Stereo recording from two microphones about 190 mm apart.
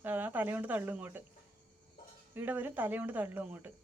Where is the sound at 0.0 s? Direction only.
10° right (ahead or behind).